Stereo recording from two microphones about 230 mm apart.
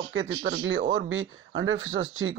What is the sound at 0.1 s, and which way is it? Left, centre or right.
Speech, right.